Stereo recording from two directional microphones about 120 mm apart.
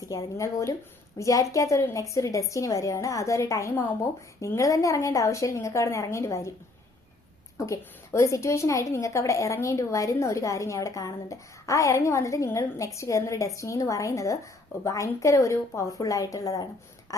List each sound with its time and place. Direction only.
0.0 s a woman's voice: 25° left (ahead or behind)
7.6 s a woman's voice: 25° left (ahead or behind)
17.1 s a sound: 30° left (ahead or behind)